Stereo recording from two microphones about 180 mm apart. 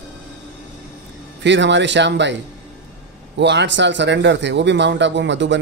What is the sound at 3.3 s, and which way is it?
A man's voice, 75° right (ahead or behind).